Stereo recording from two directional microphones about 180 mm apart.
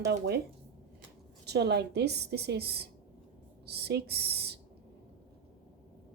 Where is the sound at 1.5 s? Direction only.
65° right (ahead or behind).